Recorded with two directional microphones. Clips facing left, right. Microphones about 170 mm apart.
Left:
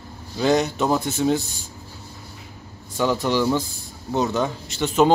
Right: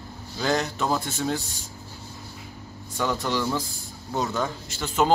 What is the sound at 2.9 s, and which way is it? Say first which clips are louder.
A man's voice: left 5 dB; 20° left (ahead or behind).